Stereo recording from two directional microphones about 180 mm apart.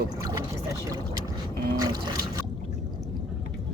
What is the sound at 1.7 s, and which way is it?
Liquid, 20° right (ahead or behind).